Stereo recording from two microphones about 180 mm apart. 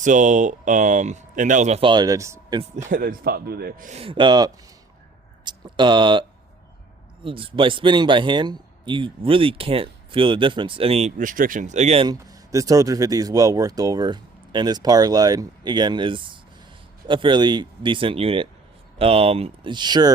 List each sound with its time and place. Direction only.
0.0 s speech: 45° right (ahead or behind); by 2.6 s 15° right (ahead or behind)
2.7 s a man's voice: 50° right (ahead or behind)
3.9 s speech: 30° right (ahead or behind)
7.3 s speech: 30° right (ahead or behind)
12.0 s speech: 20° right (ahead or behind)